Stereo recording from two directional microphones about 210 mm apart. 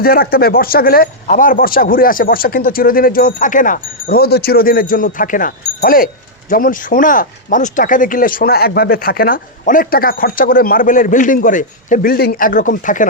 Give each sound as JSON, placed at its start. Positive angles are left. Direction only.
{"t": 0.0, "sound": "speech", "side_deg": 45}